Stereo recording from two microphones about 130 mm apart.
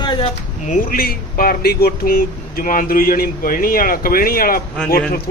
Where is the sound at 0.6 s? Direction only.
75° left (ahead or behind).